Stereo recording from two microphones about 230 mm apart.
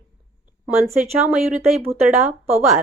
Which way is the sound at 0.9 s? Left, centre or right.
Centre.